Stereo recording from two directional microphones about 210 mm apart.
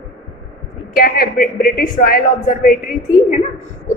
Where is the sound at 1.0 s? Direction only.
45° left (ahead or behind).